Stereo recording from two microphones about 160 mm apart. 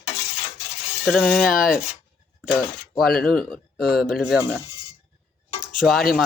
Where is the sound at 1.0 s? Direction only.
Centre (ahead or behind).